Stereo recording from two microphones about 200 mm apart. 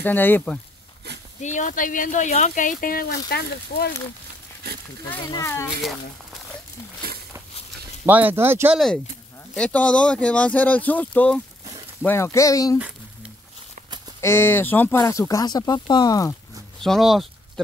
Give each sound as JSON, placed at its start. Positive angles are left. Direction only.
{"t": 0.0, "sound": "speech", "side_deg": 10}
{"t": 1.4, "sound": "speech", "side_deg": 40}
{"t": 5.0, "sound": "speech", "side_deg": 15}
{"t": 8.0, "sound": "speech", "side_deg": -10}
{"t": 8.7, "sound": "speech", "side_deg": 0}
{"t": 14.2, "sound": "speech", "side_deg": 10}
{"t": 16.8, "sound": "speech", "side_deg": 0}